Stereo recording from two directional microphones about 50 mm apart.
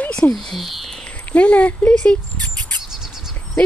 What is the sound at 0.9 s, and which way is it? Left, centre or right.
Speech, left.